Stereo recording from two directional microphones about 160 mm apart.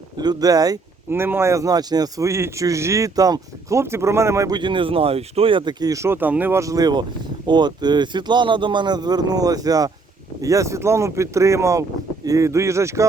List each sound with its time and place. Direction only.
0.2 s speech: 25° right (ahead or behind)